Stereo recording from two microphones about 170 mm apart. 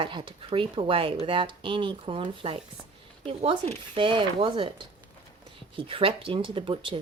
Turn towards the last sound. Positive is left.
turn(degrees=-30)  # may be behind; listen again after turning